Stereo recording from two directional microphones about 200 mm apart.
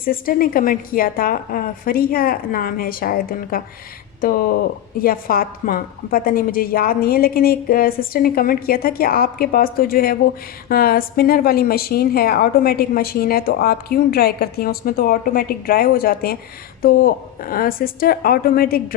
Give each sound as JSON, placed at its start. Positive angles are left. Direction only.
{"t": 0.0, "sound": "a woman's voice", "side_deg": 45}